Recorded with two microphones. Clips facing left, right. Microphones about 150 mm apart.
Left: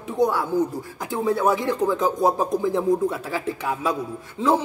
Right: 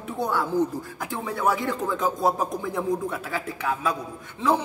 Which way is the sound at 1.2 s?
20° left (ahead or behind).